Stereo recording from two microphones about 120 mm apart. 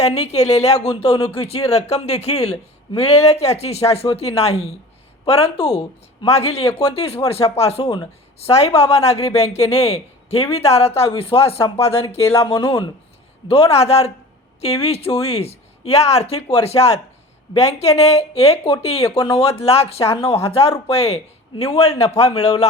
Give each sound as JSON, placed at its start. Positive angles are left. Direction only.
{"t": 0.0, "sound": "speech", "side_deg": 60}
{"t": 0.9, "sound": "speech", "side_deg": 50}
{"t": 12.2, "sound": "speech", "side_deg": 20}
{"t": 12.5, "sound": "speech", "side_deg": 45}
{"t": 13.5, "sound": "speech", "side_deg": 55}